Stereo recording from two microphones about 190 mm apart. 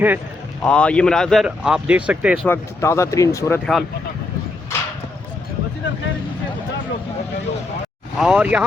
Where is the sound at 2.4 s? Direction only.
15° left (ahead or behind).